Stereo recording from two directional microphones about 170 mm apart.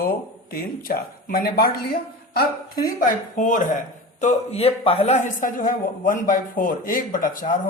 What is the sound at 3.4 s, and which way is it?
Speech, 50° left (ahead or behind).